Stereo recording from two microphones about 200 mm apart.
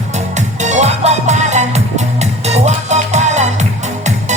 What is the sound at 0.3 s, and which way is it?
Music, 35° right (ahead or behind).